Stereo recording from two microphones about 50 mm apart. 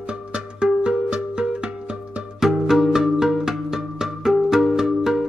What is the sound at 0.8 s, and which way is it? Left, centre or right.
Music, centre.